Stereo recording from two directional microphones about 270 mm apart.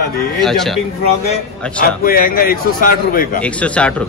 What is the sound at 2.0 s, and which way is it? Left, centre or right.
Speech, left.